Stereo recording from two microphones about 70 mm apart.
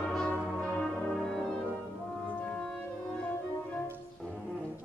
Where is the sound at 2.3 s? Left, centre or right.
Centre.